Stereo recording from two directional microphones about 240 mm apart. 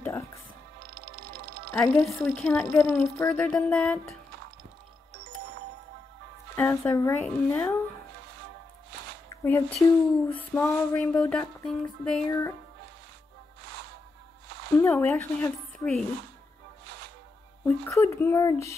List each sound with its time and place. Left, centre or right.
0.0 s music: centre
1.1 s music: right
1.7 s a woman's voice: centre
6.5 s a woman's voice: centre
9.3 s a sound: centre
12.3 s a woman's voice: centre
14.8 s a woman's voice: centre
17.6 s a woman's voice: centre